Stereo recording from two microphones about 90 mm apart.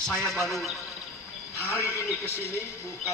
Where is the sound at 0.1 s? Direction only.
5° left (ahead or behind).